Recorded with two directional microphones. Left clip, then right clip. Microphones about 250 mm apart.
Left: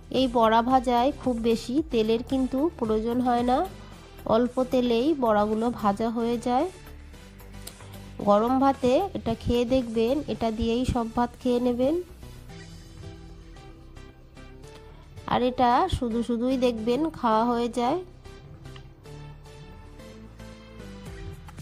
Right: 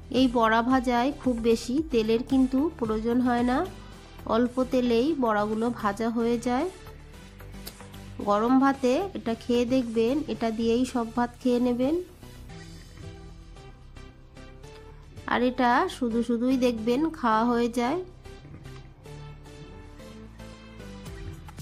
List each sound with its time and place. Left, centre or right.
0.1 s a woman's voice: left
8.2 s a woman's voice: left
15.2 s a woman's voice: left